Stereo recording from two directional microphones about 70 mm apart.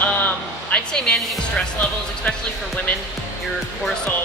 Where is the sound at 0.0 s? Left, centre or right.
Left.